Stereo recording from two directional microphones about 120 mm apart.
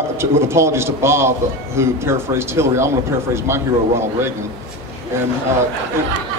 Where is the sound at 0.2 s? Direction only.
20° right (ahead or behind).